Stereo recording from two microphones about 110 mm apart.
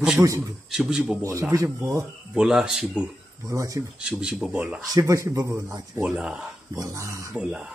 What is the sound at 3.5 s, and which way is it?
Speech, 25° right (ahead or behind).